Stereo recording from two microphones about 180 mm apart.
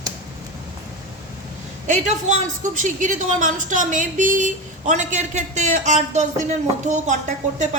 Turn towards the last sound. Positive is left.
turn(degrees=-45)  # may be behind; listen again after turning